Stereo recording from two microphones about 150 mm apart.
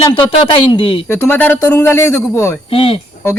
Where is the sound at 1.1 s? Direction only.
15° left (ahead or behind).